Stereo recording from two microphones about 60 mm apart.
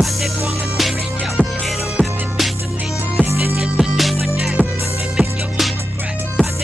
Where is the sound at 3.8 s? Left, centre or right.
Centre.